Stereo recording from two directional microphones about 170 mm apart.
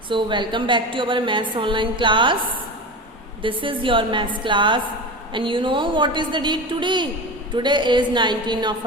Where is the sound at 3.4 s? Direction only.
30° right (ahead or behind).